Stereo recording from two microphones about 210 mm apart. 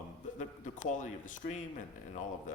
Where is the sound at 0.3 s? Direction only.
35° left (ahead or behind).